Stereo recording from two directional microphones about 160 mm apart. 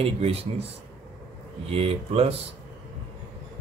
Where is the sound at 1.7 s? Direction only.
40° right (ahead or behind).